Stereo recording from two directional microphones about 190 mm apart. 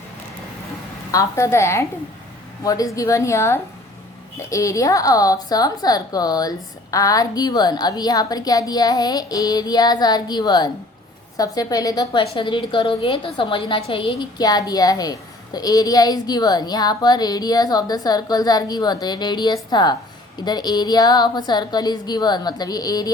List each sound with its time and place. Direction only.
1.1 s a woman's voice: 15° left (ahead or behind)